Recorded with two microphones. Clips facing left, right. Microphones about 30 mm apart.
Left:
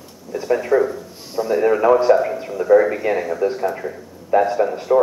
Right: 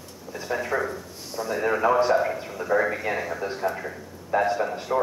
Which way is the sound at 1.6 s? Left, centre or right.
Centre.